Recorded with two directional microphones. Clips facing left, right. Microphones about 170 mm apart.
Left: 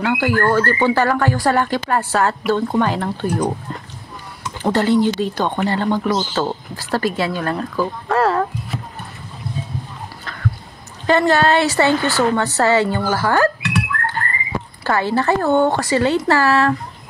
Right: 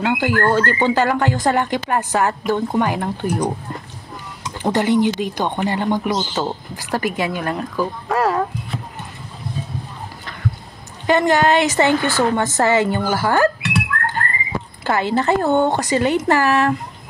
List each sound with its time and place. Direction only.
0.0 s bird: 20° right (ahead or behind)
0.4 s speech: 20° right (ahead or behind)
11.1 s speech: 15° right (ahead or behind)
14.9 s speech: 20° right (ahead or behind)